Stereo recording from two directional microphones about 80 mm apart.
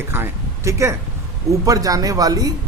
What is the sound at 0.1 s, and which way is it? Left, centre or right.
Speech, right.